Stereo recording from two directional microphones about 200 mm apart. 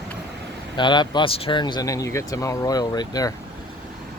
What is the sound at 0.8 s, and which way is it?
Speech, 20° left (ahead or behind).